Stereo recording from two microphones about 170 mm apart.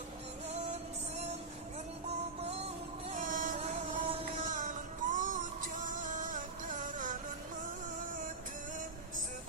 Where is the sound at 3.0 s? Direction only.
50° right (ahead or behind).